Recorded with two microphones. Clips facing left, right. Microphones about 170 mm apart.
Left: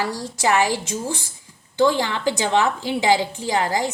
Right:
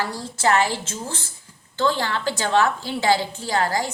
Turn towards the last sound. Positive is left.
turn(degrees=15)  # may be behind; listen again after turning